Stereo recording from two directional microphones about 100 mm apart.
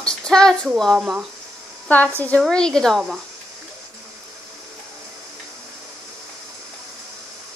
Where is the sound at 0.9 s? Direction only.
10° right (ahead or behind).